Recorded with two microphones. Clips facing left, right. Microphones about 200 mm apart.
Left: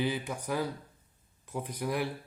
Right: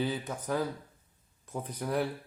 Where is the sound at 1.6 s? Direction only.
10° left (ahead or behind).